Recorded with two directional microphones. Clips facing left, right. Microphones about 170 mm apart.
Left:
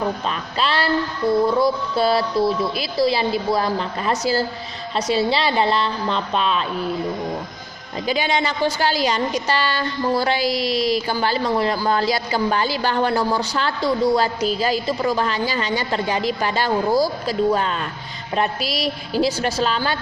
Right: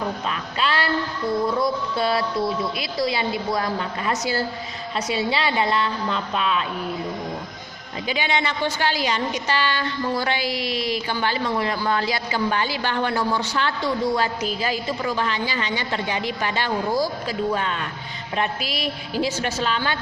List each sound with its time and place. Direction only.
0.3 s a woman's voice: 30° left (ahead or behind)
8.0 s a woman's voice: 40° left (ahead or behind)